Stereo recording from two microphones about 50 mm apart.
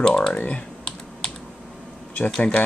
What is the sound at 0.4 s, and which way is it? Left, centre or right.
Computer keyboard, left.